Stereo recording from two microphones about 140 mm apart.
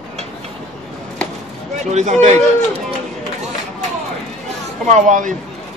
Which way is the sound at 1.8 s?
55° right (ahead or behind).